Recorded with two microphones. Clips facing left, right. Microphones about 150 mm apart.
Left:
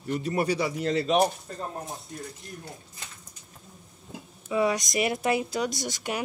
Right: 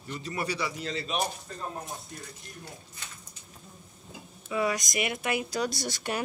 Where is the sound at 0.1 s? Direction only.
50° left (ahead or behind); by 1.1 s 65° left (ahead or behind).